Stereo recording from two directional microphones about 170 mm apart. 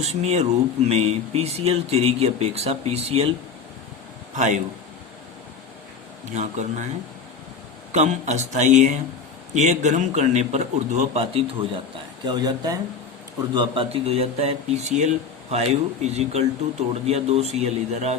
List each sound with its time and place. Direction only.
0.0 s speech: 40° right (ahead or behind)
4.4 s a man's voice: 45° right (ahead or behind)
6.3 s a man's voice: 45° right (ahead or behind)
7.9 s a man's voice: 45° right (ahead or behind)